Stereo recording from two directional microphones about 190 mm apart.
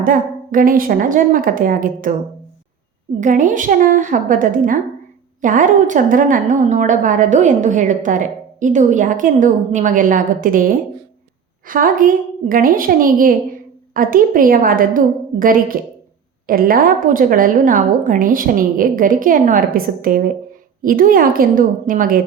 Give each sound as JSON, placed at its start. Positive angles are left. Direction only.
{"t": 0.0, "sound": "a woman's voice", "side_deg": -45}
{"t": 3.2, "sound": "a woman's voice", "side_deg": -40}